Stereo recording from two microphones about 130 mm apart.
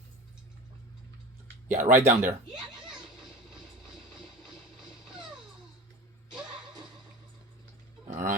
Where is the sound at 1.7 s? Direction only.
75° right (ahead or behind).